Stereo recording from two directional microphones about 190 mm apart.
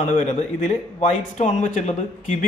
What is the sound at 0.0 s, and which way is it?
Speech, 40° left (ahead or behind).